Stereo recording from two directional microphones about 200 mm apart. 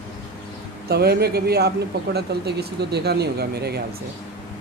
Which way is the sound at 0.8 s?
55° right (ahead or behind).